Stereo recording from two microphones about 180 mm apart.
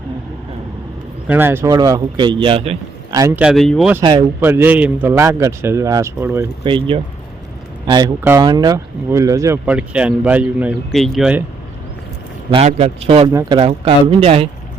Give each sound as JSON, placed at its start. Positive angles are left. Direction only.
{"t": 1.3, "sound": "a man's voice", "side_deg": -10}
{"t": 3.2, "sound": "speech", "side_deg": -15}
{"t": 3.4, "sound": "speech", "side_deg": 0}
{"t": 4.4, "sound": "speech", "side_deg": -10}
{"t": 6.7, "sound": "a man's voice", "side_deg": -30}
{"t": 12.5, "sound": "speech", "side_deg": -35}
{"t": 13.2, "sound": "speech", "side_deg": -20}